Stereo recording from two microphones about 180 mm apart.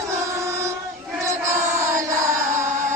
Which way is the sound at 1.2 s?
15° right (ahead or behind).